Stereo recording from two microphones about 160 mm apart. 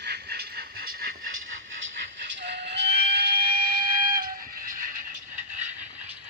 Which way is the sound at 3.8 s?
65° right (ahead or behind).